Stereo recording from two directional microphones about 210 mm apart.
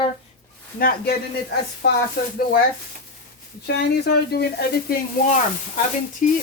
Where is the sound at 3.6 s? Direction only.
50° left (ahead or behind).